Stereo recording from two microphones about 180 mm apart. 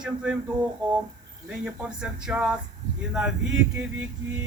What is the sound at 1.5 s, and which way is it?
Speech, 5° right (ahead or behind).